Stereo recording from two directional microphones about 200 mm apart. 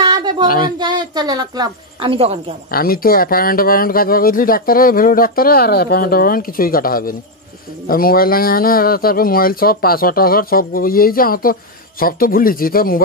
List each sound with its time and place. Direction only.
0.0 s a sound: 20° right (ahead or behind)
0.7 s a woman's voice: 20° right (ahead or behind)
2.7 s speech: 45° left (ahead or behind)